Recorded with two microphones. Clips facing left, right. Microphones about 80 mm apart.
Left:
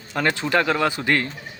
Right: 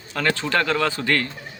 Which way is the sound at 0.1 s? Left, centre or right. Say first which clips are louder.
Left 1 dB; centre.